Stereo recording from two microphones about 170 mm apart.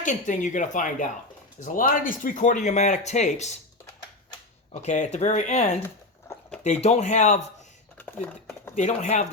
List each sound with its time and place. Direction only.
0.0 s speech: 45° left (ahead or behind)
4.7 s speech: 45° left (ahead or behind)
8.7 s speech: 45° left (ahead or behind)